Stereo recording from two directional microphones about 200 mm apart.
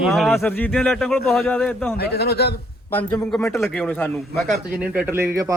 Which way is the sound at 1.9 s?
50° left (ahead or behind).